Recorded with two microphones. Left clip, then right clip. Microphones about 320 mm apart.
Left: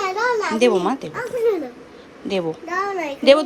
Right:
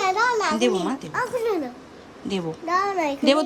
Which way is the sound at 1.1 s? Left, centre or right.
Centre.